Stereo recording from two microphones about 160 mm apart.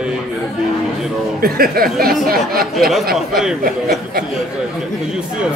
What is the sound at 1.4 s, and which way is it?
Speech, 65° right (ahead or behind).